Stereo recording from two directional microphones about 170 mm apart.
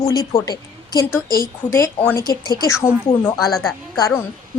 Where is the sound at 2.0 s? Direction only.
20° left (ahead or behind).